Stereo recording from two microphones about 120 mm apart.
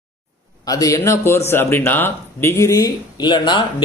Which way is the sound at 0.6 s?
30° left (ahead or behind).